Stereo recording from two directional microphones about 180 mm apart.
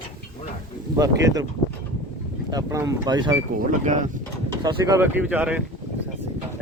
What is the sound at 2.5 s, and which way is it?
Speech, 20° right (ahead or behind).